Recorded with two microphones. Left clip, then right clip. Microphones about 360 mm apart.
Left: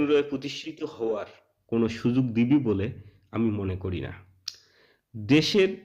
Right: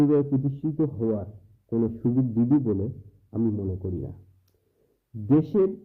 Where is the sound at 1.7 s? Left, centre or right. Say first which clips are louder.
Even; left.